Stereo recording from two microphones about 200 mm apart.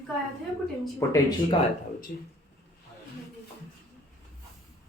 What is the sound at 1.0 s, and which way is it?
Speech, 15° left (ahead or behind).